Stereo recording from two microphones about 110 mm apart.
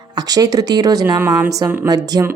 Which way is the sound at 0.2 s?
35° right (ahead or behind).